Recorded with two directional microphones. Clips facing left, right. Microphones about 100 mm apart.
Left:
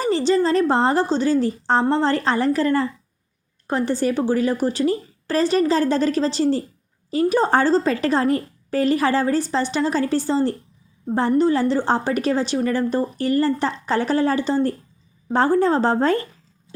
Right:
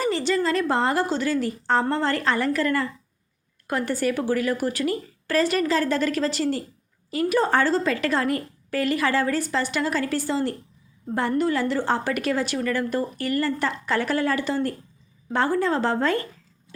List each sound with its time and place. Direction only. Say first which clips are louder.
0.0 s a woman's voice: left 4 dB; 30° left (ahead or behind)